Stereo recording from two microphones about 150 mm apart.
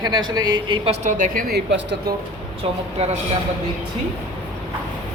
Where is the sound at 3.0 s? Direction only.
45° right (ahead or behind).